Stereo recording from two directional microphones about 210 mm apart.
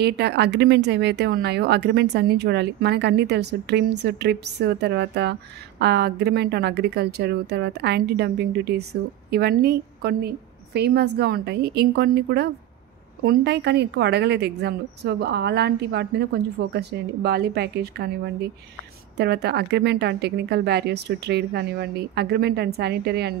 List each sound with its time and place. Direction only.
0.0 s speech: 50° right (ahead or behind)